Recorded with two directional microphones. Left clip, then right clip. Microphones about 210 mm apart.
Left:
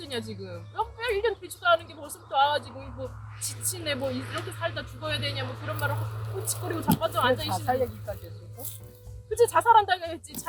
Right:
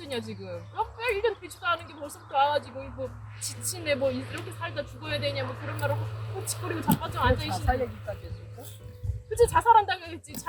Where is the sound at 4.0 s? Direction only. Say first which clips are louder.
Right 3 dB; 30° left (ahead or behind).